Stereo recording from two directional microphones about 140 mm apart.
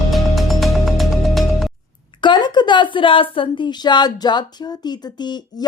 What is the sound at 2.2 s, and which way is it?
A woman's voice, 30° left (ahead or behind).